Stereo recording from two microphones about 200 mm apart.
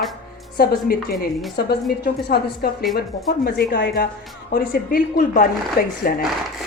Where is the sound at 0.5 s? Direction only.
50° left (ahead or behind).